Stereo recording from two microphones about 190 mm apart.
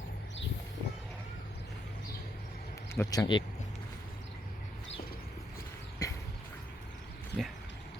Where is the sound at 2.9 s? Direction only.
15° left (ahead or behind).